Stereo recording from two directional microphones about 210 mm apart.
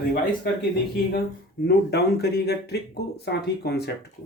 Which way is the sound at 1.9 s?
50° left (ahead or behind).